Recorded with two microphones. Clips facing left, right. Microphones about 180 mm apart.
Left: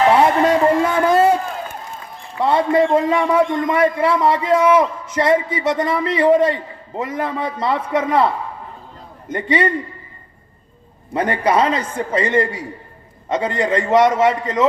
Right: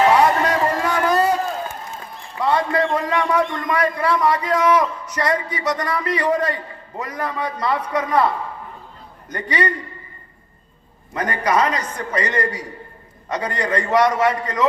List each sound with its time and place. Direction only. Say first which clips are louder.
0.1 s a sound: left 3 dB; 25° left (ahead or behind)
2.4 s a man's voice: left 4 dB; 25° left (ahead or behind)
9.3 s a man's voice: left 4 dB; 25° left (ahead or behind)
11.1 s a man's voice: left 3 dB; 30° left (ahead or behind)